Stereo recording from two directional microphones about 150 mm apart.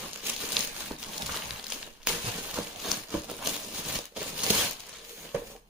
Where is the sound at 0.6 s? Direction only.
Centre (ahead or behind).